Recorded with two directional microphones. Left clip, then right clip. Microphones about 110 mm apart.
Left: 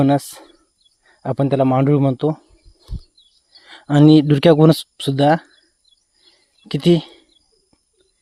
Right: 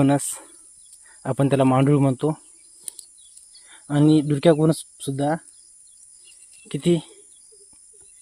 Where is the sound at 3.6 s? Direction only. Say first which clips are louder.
Left 7 dB; 45° left (ahead or behind); by 5.5 s 90° left.